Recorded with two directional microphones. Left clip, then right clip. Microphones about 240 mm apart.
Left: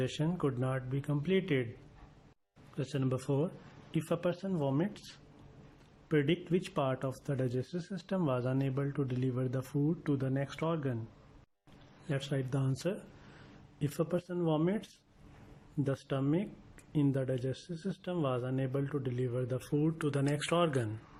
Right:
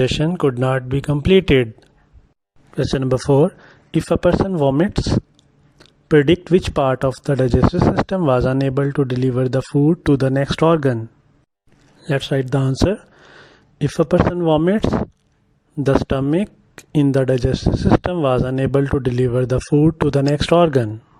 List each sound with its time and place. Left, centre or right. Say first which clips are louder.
0.0 s speech: right 17 dB; right
2.7 s speech: right 17 dB; right
12.0 s speech: right 17 dB; right